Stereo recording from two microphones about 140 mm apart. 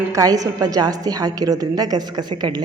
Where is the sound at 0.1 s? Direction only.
25° right (ahead or behind).